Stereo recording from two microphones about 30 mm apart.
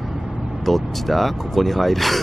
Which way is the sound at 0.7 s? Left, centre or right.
Centre.